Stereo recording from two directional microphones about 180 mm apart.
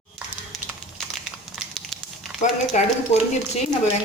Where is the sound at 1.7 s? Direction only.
Centre (ahead or behind).